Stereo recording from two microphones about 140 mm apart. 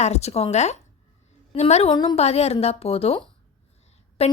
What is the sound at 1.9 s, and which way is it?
Speech, 30° left (ahead or behind).